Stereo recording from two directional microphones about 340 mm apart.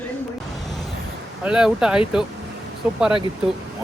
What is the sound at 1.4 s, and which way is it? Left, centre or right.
Speech, centre.